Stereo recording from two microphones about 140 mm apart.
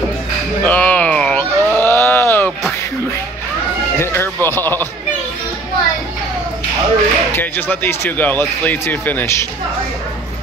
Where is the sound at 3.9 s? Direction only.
15° left (ahead or behind).